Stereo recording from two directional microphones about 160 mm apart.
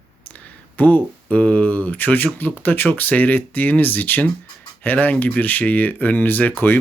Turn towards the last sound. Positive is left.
turn(degrees=10)  # may be behind; listen again after turning